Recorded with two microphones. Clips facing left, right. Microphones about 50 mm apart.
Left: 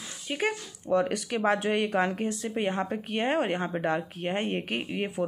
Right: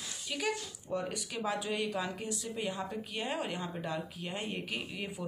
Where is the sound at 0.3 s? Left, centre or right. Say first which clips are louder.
Left 6 dB; left.